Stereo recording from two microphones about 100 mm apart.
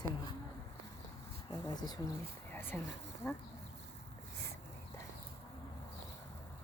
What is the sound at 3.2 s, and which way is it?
Speech, 20° left (ahead or behind).